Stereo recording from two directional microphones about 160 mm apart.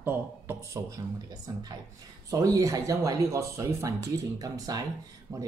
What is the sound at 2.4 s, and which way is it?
Speech, 20° right (ahead or behind).